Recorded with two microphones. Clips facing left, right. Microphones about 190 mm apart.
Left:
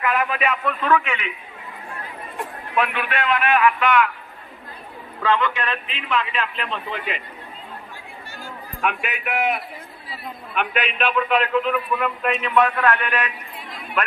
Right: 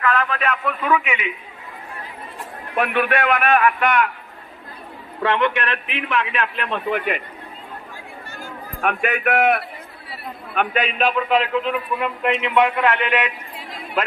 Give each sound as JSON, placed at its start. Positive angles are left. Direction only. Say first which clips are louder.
{"t": 0.0, "sound": "a sound", "louder": "right 1 dB", "side_deg": 15}
{"t": 0.7, "sound": "a man's voice", "louder": "even", "side_deg": -10}
{"t": 2.7, "sound": "a man's voice", "louder": "right 4 dB", "side_deg": -55}
{"t": 5.2, "sound": "a man's voice", "louder": "right 2 dB", "side_deg": -70}
{"t": 8.8, "sound": "a man's voice", "louder": "right 5 dB", "side_deg": -50}
{"t": 10.6, "sound": "a man's voice", "louder": "right 3 dB", "side_deg": -40}